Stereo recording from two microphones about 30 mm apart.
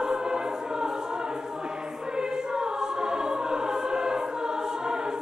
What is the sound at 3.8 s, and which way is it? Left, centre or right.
Music, right.